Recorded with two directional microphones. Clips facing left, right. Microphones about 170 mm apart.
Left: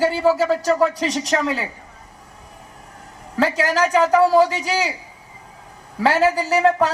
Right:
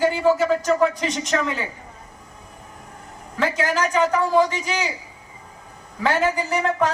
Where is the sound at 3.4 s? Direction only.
35° left (ahead or behind).